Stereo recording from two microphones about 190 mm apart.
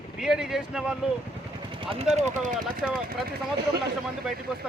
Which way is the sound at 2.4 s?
40° right (ahead or behind).